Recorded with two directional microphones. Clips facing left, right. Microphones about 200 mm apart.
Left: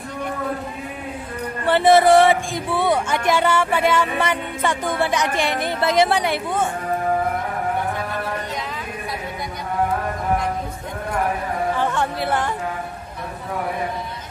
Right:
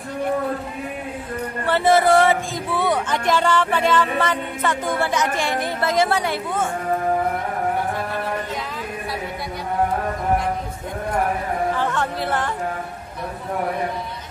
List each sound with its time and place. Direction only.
1.7 s speech: 15° left (ahead or behind)
11.8 s speech: 10° left (ahead or behind)